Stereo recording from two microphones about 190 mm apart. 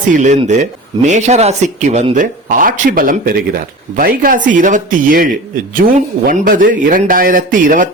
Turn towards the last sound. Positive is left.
turn(degrees=-45)  # may be behind; listen again after turning